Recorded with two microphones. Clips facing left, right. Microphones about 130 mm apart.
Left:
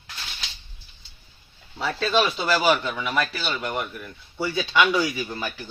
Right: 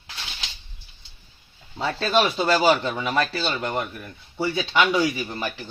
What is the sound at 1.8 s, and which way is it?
Speech, 25° right (ahead or behind).